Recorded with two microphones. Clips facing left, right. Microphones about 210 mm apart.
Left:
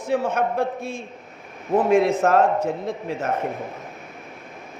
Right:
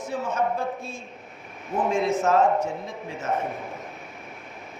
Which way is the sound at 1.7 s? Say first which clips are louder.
Left 6 dB; 60° left (ahead or behind).